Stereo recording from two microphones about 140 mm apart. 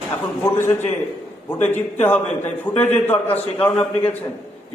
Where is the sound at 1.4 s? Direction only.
15° left (ahead or behind).